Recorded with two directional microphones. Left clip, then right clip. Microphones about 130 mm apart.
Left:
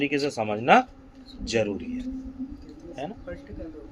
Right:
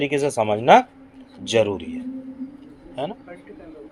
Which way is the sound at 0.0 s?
25° right (ahead or behind).